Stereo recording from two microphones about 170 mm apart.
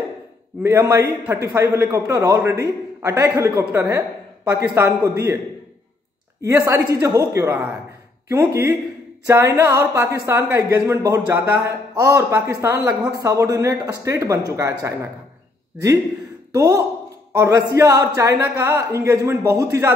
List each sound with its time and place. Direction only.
0.6 s a woman's voice: 15° right (ahead or behind)
6.4 s a woman's voice: 20° right (ahead or behind)
16.5 s a woman's voice: 20° right (ahead or behind)